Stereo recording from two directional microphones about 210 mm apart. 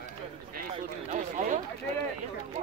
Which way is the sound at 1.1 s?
35° right (ahead or behind).